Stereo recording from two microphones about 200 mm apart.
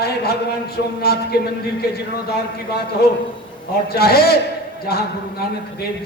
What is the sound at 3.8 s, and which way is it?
Speech, 50° left (ahead or behind).